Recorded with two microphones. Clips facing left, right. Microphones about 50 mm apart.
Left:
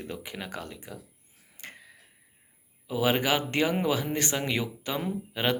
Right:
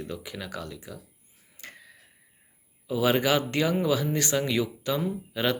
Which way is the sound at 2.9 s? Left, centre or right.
Left.